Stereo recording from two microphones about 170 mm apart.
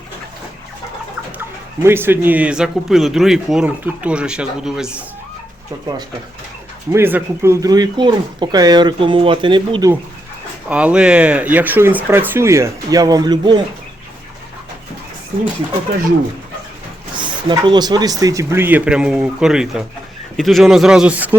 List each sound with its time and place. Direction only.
1.4 s speech: 15° right (ahead or behind)
6.9 s speech: 15° right (ahead or behind)
10.7 s speech: 5° right (ahead or behind); by 13.6 s 25° right (ahead or behind)
17.2 s speech: 25° right (ahead or behind); by 21.3 s 10° right (ahead or behind)